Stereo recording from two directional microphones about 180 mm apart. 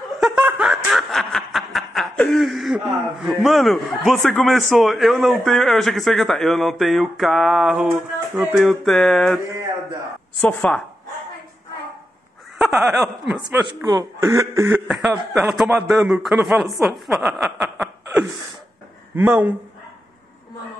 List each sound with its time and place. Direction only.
0.2 s snicker: 5° right (ahead or behind)
12.5 s speech: centre (ahead or behind)
13.8 s speech: 20° right (ahead or behind)
14.7 s a man's voice: centre (ahead or behind)